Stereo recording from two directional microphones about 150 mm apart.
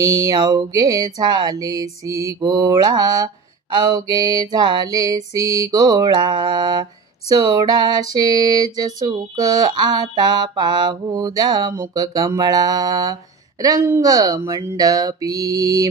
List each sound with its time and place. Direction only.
0.0 s mantra: 20° right (ahead or behind)
12.4 s speech: 25° right (ahead or behind)
13.8 s mantra: 20° right (ahead or behind)